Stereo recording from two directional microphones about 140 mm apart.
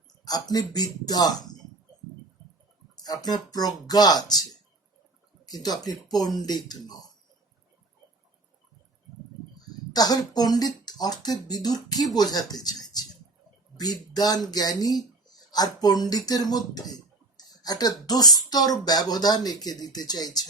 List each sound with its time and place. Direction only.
0.3 s speech: 25° left (ahead or behind)
2.9 s speech: 30° left (ahead or behind)
5.5 s speech: 30° left (ahead or behind)
9.6 s speech: 30° left (ahead or behind)